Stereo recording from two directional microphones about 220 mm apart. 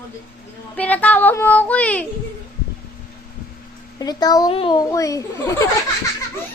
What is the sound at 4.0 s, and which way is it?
A child's voice, 15° left (ahead or behind).